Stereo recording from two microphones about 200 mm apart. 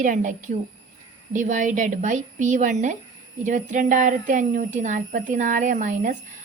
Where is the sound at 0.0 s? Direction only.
40° right (ahead or behind).